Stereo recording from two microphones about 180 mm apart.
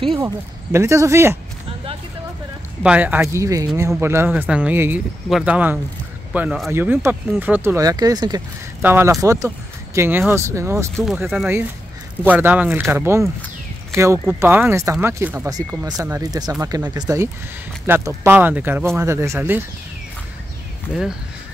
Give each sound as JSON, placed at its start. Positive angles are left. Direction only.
{"t": 0.7, "sound": "speech", "side_deg": -15}
{"t": 2.8, "sound": "speech", "side_deg": -10}